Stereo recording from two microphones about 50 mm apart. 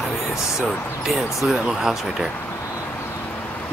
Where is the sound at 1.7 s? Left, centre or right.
Centre.